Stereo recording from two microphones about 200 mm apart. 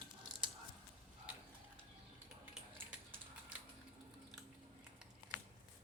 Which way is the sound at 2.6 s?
5° right (ahead or behind).